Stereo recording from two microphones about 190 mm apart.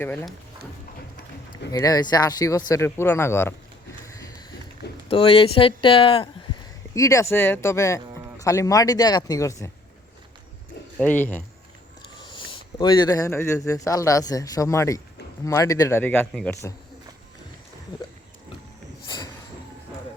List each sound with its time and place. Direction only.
0.0 s speech: 10° left (ahead or behind)
1.7 s speech: 20° left (ahead or behind)
4.0 s a sound: 15° left (ahead or behind)
5.0 s speech: 30° left (ahead or behind)
6.9 s speech: 15° left (ahead or behind)
10.9 s speech: 10° left (ahead or behind)
12.2 s speech: 25° left (ahead or behind); by 16.6 s 5° left (ahead or behind)
19.0 s a sound: 25° left (ahead or behind)